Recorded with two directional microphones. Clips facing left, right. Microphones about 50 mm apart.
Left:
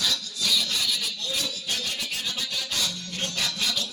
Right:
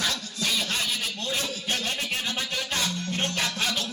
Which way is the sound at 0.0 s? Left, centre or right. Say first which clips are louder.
Even; right.